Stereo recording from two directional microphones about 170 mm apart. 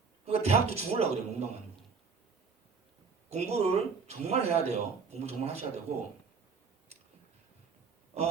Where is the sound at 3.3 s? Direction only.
40° right (ahead or behind).